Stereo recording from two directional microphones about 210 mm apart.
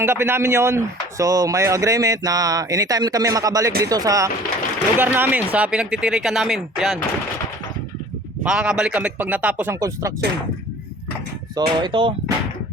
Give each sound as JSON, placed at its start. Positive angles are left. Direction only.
{"t": 0.0, "sound": "speech", "side_deg": -10}
{"t": 8.4, "sound": "speech", "side_deg": -5}
{"t": 11.6, "sound": "speech", "side_deg": -25}